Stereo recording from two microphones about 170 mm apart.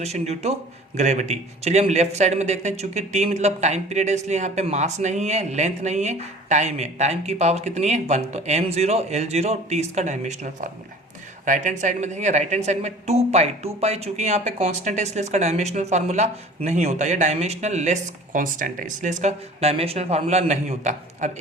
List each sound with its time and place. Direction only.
0.0 s a man's voice: 40° right (ahead or behind)